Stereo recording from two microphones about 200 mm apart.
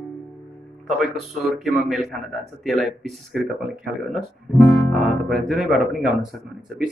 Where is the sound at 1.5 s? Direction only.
Centre (ahead or behind).